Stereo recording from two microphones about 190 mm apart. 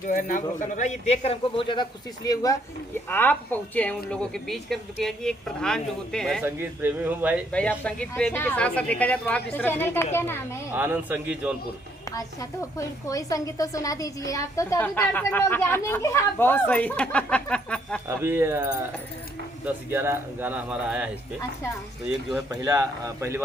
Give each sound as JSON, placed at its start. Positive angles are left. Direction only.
{"t": 0.1, "sound": "a man's voice", "side_deg": 45}
{"t": 6.4, "sound": "speech", "side_deg": -10}
{"t": 7.5, "sound": "speech", "side_deg": 5}
{"t": 10.7, "sound": "speech", "side_deg": -10}
{"t": 12.0, "sound": "speech", "side_deg": 15}
{"t": 18.2, "sound": "speech", "side_deg": -10}
{"t": 22.3, "sound": "speech", "side_deg": -10}